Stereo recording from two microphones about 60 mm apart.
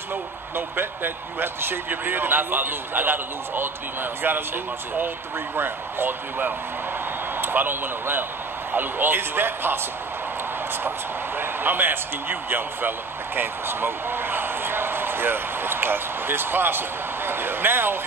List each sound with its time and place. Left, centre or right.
0.1 s speech: right
5.6 s speech: right
11.3 s speech: right
13.4 s a sound: right